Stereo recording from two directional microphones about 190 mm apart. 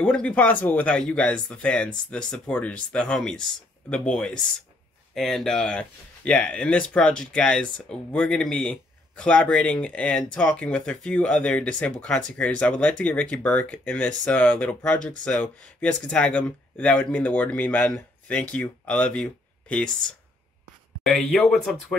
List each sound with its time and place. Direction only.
0.0 s speech: 5° left (ahead or behind)
21.0 s speech: centre (ahead or behind)